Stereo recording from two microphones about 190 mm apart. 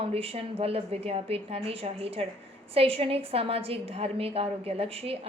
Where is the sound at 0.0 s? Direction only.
30° right (ahead or behind).